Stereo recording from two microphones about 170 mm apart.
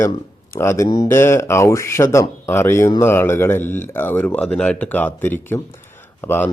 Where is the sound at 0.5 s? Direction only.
15° left (ahead or behind).